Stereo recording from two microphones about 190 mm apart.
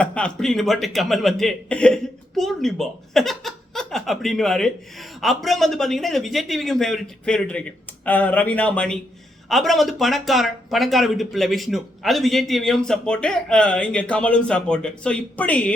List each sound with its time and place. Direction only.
0.0 s speech: 5° left (ahead or behind)